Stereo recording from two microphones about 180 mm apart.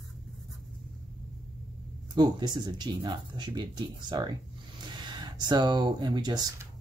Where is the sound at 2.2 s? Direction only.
25° right (ahead or behind).